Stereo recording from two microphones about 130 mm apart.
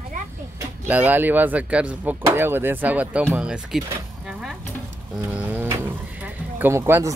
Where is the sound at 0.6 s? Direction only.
10° right (ahead or behind).